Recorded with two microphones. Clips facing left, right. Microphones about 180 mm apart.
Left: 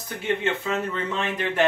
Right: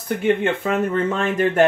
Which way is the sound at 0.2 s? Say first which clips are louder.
Right 5 dB; 55° right (ahead or behind).